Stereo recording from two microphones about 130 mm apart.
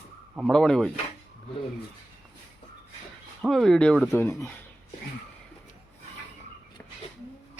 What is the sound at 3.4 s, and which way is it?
Speech, centre (ahead or behind).